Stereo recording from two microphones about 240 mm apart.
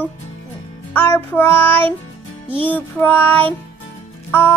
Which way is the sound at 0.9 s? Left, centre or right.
Centre.